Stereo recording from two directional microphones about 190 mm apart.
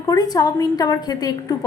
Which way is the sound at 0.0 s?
20° left (ahead or behind).